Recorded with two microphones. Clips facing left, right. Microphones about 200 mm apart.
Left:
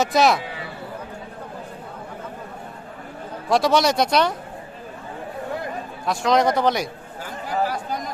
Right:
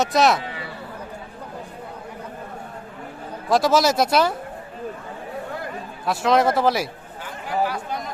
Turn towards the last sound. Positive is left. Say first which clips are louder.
# even
turn(degrees=40)  # may be behind; listen again after turning